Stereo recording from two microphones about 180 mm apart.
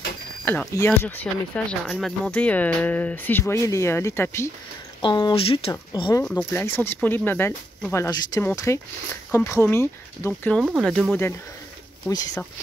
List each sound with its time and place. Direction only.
0.5 s speech: 10° left (ahead or behind)
6.2 s speech: 10° left (ahead or behind)
10.6 s speech: 5° right (ahead or behind)
12.1 s speech: 20° left (ahead or behind)